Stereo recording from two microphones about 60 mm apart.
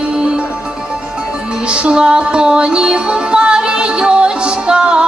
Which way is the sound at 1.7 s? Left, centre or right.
Centre.